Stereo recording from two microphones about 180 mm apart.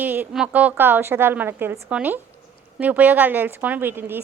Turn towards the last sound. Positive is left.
turn(degrees=-10)  # may be behind; listen again after turning